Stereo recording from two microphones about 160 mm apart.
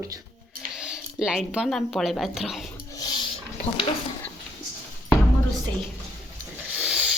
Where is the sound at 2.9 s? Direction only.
25° left (ahead or behind).